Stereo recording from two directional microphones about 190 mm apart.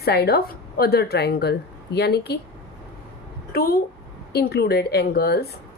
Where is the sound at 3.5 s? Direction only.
50° left (ahead or behind).